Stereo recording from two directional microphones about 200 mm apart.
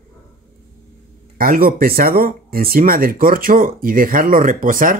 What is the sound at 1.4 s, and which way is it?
Speech, 45° right (ahead or behind).